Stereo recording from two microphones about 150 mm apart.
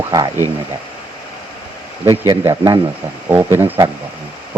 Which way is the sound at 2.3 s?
15° right (ahead or behind).